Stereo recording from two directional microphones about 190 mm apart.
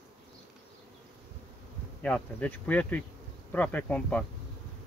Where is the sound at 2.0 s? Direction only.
10° left (ahead or behind).